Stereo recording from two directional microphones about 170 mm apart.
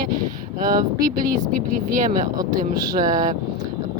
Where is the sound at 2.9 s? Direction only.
50° right (ahead or behind).